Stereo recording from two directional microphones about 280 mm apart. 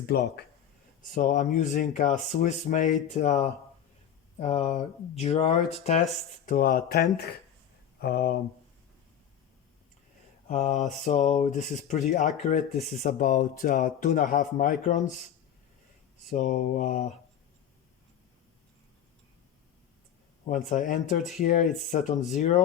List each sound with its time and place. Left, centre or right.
0.0 s speech: left
7.9 s a sound: left
10.5 s speech: left
16.3 s speech: left
20.7 s speech: left